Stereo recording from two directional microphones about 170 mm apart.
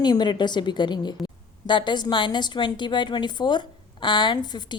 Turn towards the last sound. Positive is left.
turn(degrees=25)  # may be behind; listen again after turning